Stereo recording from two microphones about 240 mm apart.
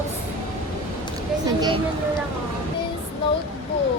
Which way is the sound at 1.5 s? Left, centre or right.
Centre.